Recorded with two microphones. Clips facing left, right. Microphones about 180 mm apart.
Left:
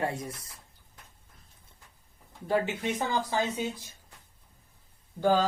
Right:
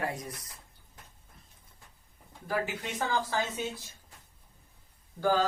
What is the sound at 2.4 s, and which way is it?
Speech, 25° left (ahead or behind).